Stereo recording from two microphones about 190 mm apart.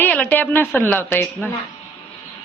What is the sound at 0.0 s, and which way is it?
A man's voice, 10° left (ahead or behind).